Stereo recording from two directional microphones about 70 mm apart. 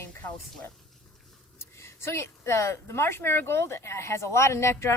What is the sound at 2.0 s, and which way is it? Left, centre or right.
Speech, left.